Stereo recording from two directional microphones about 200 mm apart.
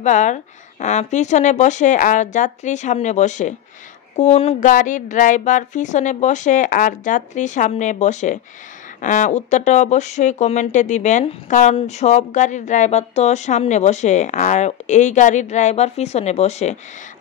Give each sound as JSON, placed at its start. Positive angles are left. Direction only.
{"t": 0.0, "sound": "speech", "side_deg": 40}